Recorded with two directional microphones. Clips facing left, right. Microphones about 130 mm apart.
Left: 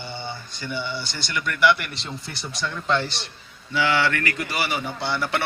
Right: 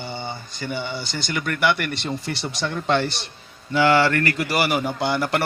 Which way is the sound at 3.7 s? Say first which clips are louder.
Right 5 dB; 45° right (ahead or behind).